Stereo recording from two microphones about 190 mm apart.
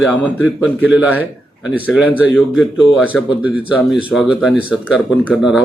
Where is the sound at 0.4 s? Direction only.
5° right (ahead or behind).